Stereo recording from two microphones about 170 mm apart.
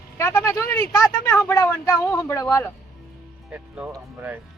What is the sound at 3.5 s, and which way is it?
Speech, 15° right (ahead or behind).